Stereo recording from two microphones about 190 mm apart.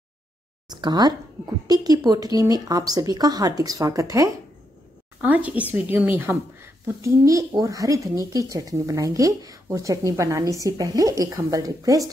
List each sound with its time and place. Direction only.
0.7 s speech: 20° right (ahead or behind)